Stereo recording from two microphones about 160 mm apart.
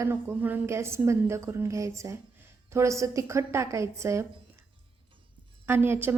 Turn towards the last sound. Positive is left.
turn(degrees=-15)  # may be behind; listen again after turning